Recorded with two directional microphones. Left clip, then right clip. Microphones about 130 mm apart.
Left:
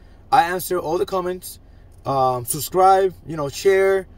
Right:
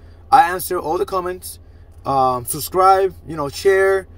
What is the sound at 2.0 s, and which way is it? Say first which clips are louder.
Speech: right 3 dB; 20° left (ahead or behind).